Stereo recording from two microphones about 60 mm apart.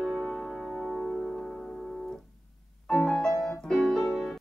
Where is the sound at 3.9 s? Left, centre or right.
Centre.